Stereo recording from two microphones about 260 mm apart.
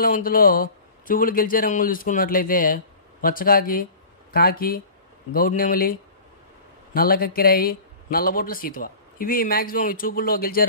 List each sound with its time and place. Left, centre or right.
0.0 s a man's voice: left